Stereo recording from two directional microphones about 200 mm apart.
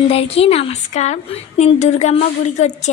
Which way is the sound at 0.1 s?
30° left (ahead or behind).